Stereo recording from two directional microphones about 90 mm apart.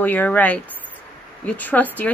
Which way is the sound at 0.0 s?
20° left (ahead or behind).